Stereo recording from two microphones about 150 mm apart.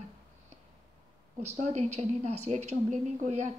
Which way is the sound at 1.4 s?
45° right (ahead or behind).